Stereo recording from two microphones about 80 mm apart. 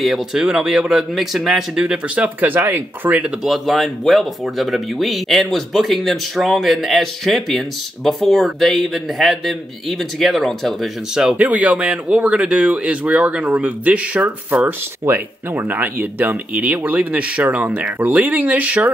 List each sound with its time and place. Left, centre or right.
0.0 s speech: centre; by 3.3 s right
3.4 s speech: centre
11.1 s speech: centre